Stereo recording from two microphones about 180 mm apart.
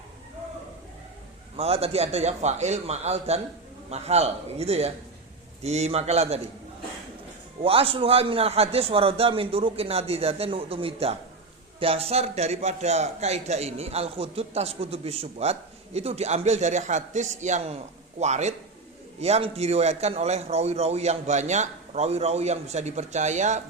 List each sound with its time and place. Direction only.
1.5 s a man's voice: 35° right (ahead or behind)
7.6 s a man's voice: 30° right (ahead or behind)